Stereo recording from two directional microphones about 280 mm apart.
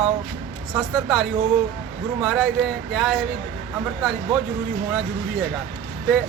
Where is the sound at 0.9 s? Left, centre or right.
Centre.